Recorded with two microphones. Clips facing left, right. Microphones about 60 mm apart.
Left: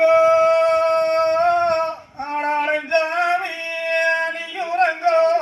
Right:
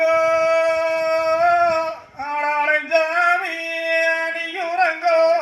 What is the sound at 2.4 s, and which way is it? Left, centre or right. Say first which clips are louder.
Male singing: right 2 dB; right.